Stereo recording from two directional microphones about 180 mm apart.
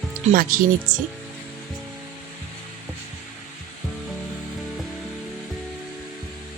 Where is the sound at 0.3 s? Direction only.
50° right (ahead or behind).